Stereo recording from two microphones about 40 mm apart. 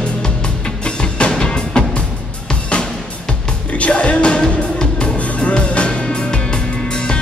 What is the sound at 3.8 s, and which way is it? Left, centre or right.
Music, left.